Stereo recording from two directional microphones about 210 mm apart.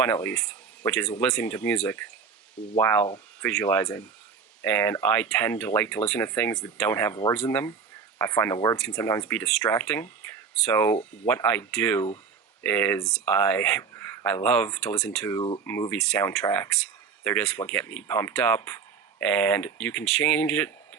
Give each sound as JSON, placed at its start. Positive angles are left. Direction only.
{"t": 0.0, "sound": "speech", "side_deg": 10}
{"t": 8.8, "sound": "speech", "side_deg": 5}
{"t": 15.4, "sound": "speech", "side_deg": 25}
{"t": 15.6, "sound": "speech", "side_deg": 10}